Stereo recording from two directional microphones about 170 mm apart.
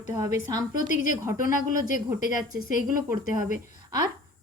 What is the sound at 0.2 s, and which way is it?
A woman's voice, 20° right (ahead or behind).